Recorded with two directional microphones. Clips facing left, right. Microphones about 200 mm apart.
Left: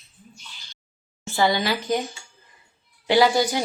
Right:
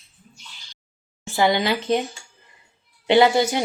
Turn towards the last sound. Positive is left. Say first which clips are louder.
# right 2 dB
turn(degrees=-20)  # may be behind; listen again after turning